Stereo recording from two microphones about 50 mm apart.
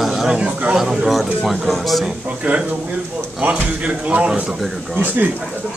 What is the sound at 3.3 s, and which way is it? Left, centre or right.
Speech, right.